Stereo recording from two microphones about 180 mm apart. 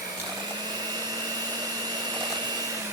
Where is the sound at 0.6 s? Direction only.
20° right (ahead or behind).